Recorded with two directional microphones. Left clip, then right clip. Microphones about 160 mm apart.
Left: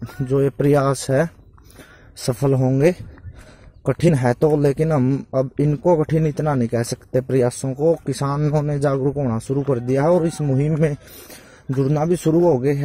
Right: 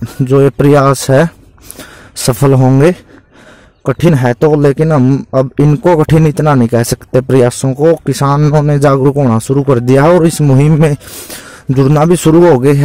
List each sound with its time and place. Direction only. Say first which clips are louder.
0.3 s a man's voice: right 10 dB; 35° right (ahead or behind)
3.8 s a man's voice: right 7 dB; 20° right (ahead or behind); by 12.8 s 45° right (ahead or behind)